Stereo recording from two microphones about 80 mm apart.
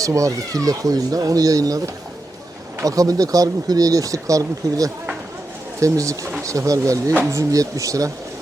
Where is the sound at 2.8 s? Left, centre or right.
Right.